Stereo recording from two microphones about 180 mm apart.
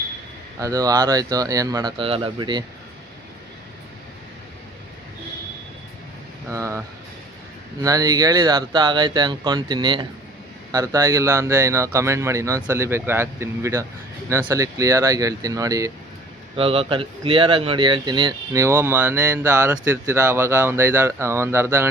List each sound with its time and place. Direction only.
0.6 s speech: 20° right (ahead or behind)
6.5 s speech: 15° right (ahead or behind)
16.6 s speech: 30° right (ahead or behind); by 21.8 s 15° right (ahead or behind)